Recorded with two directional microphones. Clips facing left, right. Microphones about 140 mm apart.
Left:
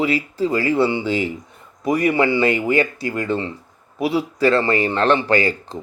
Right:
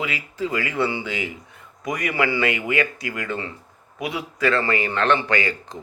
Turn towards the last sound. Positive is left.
turn(degrees=35)  # may be behind; listen again after turning